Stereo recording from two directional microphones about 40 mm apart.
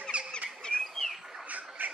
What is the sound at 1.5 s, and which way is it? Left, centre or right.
Frog, right.